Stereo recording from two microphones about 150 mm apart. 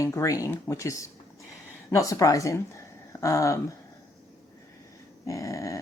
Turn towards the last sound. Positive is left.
turn(degrees=20)  # may be behind; listen again after turning